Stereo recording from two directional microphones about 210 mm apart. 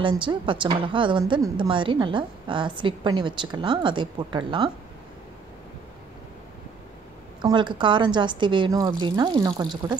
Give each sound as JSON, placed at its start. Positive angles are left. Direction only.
{"t": 0.0, "sound": "a woman's voice", "side_deg": -25}
{"t": 7.4, "sound": "a woman's voice", "side_deg": -20}